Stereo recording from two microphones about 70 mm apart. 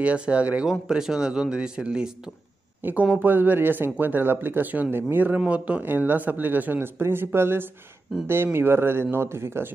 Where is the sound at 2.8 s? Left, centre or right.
Right.